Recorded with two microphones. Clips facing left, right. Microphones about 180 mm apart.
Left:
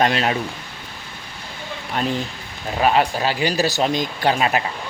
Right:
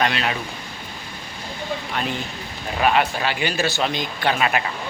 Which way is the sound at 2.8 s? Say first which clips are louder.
Left 2 dB; 35° left (ahead or behind).